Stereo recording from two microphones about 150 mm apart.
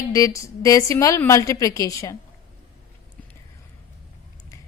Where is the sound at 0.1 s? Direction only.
20° left (ahead or behind).